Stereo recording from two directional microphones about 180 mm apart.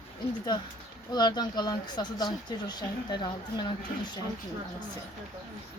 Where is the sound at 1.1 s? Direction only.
25° left (ahead or behind).